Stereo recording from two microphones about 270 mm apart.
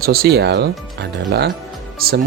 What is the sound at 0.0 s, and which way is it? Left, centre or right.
Speech, right.